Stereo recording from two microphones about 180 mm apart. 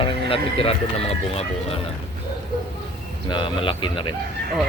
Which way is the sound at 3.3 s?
25° left (ahead or behind).